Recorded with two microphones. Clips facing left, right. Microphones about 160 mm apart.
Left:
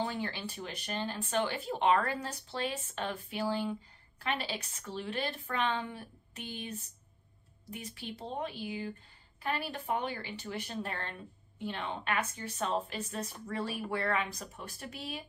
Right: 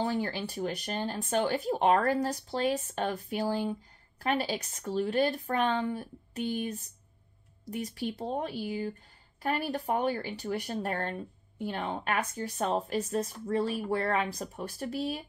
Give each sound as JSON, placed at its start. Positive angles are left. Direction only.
{"t": 0.0, "sound": "speech", "side_deg": -40}